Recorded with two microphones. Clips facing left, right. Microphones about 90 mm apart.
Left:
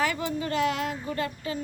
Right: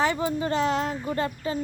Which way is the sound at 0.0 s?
30° right (ahead or behind).